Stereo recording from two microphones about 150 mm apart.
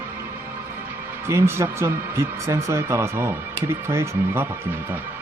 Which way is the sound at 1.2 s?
15° right (ahead or behind).